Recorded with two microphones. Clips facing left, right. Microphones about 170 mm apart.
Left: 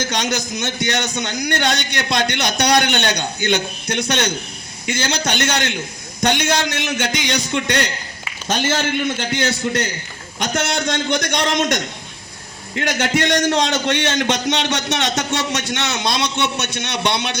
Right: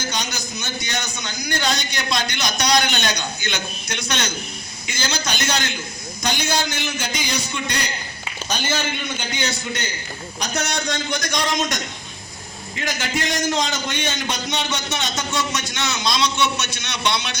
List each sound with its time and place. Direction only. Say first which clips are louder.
0.0 s a man's voice: left 6 dB; 90° left
10.4 s a man's voice: left 5 dB; 75° left (ahead or behind); by 11.8 s 60° left (ahead or behind)
12.7 s a man's voice: left 6 dB; 70° left (ahead or behind)